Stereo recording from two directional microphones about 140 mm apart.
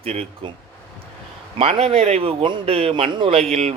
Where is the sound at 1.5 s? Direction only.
45° right (ahead or behind).